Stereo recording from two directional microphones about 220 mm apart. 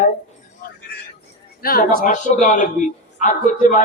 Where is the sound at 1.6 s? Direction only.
40° left (ahead or behind).